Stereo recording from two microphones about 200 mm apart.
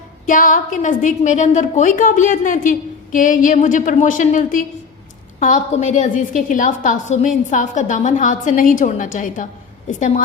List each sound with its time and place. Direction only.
0.3 s a woman's voice: 40° left (ahead or behind)